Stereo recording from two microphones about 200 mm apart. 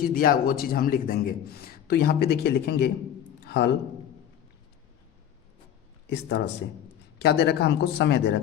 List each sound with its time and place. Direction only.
0.0 s a man's voice: 45° left (ahead or behind)
3.4 s a sound: 60° left (ahead or behind)
6.1 s speech: 55° left (ahead or behind)